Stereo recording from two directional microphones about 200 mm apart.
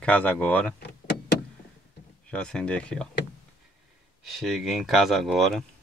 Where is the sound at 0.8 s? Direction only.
55° left (ahead or behind).